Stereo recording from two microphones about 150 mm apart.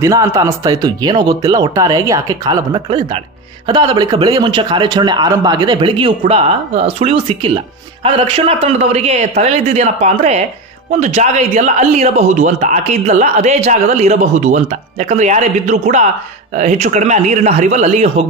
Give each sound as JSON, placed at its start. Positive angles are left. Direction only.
{"t": 0.0, "sound": "a man's voice", "side_deg": -20}